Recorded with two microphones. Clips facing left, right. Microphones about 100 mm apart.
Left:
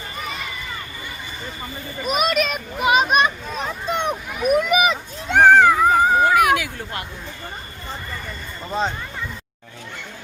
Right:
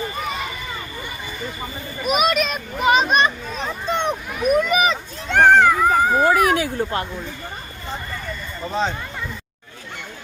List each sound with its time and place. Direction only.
2.0 s a child's voice: 5° right (ahead or behind)
6.2 s speech: 35° right (ahead or behind)